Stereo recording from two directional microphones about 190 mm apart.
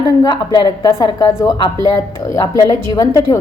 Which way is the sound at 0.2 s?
20° left (ahead or behind).